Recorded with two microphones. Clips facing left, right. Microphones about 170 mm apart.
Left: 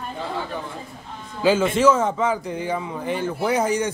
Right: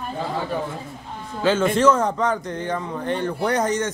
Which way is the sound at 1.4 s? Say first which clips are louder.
Even; 10° left (ahead or behind).